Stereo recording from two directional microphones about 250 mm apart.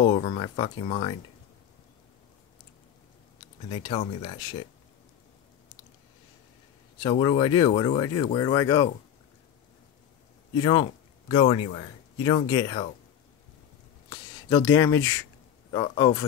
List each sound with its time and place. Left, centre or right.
0.0 s speech: left
3.7 s speech: left
7.0 s speech: centre
10.5 s a man's voice: centre
14.0 s speech: centre